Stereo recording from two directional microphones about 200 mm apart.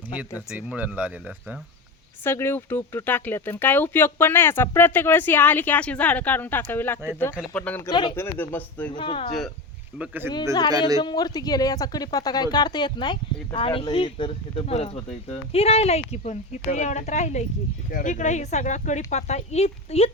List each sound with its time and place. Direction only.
0.3 s speech: 5° right (ahead or behind)
2.2 s speech: 10° left (ahead or behind)
7.9 s speech: 20° left (ahead or behind)
8.1 s speech: 10° left (ahead or behind)
8.9 s speech: 25° left (ahead or behind)
10.0 s speech: 10° right (ahead or behind)
11.0 s speech: 20° left (ahead or behind)